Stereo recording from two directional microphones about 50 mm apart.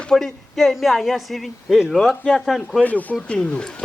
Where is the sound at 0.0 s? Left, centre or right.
Centre.